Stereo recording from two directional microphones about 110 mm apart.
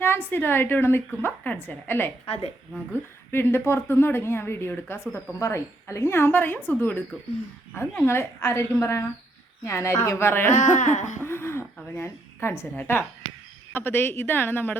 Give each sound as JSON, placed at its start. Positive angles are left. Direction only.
{"t": 0.0, "sound": "speech", "side_deg": 20}
{"t": 2.2, "sound": "a woman's voice", "side_deg": 65}
{"t": 3.3, "sound": "speech", "side_deg": 20}
{"t": 10.6, "sound": "speech", "side_deg": 90}
{"t": 11.2, "sound": "a sound", "side_deg": 20}
{"t": 11.9, "sound": "speech", "side_deg": 25}